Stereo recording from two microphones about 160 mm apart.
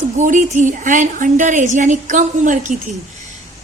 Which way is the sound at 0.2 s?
50° right (ahead or behind).